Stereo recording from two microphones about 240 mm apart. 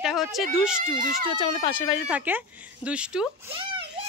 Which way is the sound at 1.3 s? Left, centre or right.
Left.